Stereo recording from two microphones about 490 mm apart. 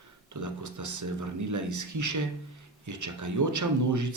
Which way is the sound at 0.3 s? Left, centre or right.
Right.